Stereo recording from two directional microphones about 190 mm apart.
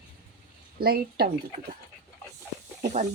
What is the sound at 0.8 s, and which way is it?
Speech, 50° right (ahead or behind).